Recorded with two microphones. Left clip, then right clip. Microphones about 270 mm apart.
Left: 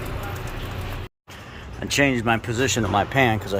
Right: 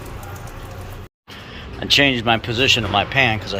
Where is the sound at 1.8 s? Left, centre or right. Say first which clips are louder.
Right 5 dB; centre.